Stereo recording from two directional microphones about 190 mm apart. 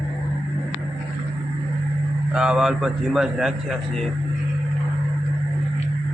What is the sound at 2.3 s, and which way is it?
A man's voice, 5° right (ahead or behind).